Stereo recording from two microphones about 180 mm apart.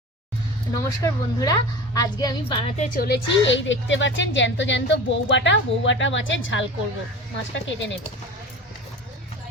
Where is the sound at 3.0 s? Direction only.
75° left (ahead or behind).